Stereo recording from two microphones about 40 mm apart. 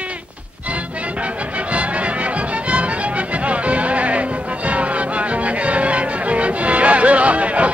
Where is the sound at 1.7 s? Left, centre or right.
Right.